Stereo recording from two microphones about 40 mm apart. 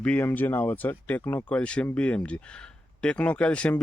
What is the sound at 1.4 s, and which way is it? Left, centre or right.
Speech, left.